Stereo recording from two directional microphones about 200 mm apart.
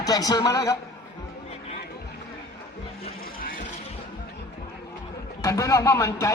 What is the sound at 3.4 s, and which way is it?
Vehicle, 45° left (ahead or behind).